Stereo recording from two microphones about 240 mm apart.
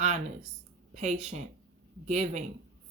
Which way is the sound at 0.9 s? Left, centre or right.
Right.